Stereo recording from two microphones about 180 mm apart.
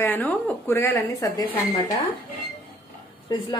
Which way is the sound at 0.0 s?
10° left (ahead or behind).